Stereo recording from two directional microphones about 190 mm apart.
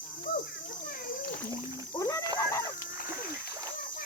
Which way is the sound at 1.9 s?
15° left (ahead or behind).